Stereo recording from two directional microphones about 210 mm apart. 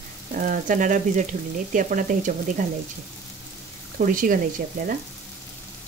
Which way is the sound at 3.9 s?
40° right (ahead or behind).